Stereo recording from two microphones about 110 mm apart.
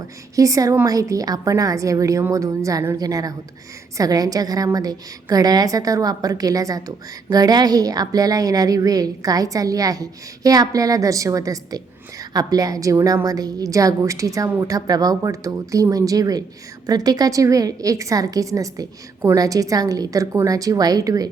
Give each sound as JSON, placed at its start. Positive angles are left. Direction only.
{"t": 0.3, "sound": "a woman's voice", "side_deg": -30}